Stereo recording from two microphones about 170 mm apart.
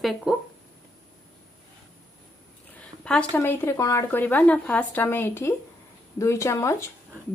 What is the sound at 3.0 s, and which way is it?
A woman's voice, 5° left (ahead or behind).